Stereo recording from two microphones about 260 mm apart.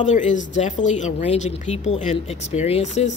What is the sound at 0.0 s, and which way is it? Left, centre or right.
Speech, left.